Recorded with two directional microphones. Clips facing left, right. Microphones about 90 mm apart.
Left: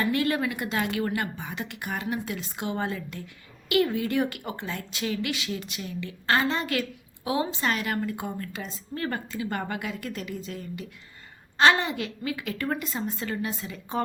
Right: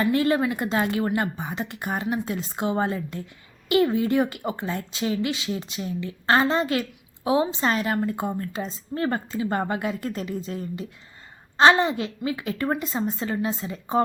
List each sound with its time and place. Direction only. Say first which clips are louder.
0.0 s a woman's voice: right 4 dB; 30° right (ahead or behind)